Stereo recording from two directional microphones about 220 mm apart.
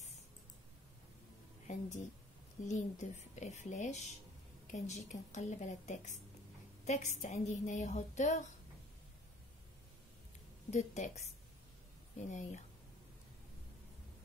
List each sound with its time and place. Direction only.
1.7 s a woman's voice: 30° left (ahead or behind)
10.7 s a woman's voice: 30° left (ahead or behind)